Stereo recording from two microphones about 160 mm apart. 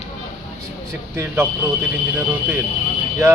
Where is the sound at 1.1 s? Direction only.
15° right (ahead or behind).